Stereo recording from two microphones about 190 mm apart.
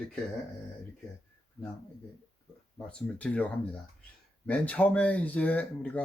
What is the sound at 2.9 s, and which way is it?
Speech, 5° left (ahead or behind).